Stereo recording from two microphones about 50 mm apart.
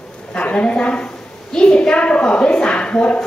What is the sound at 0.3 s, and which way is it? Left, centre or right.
A woman's voice, left.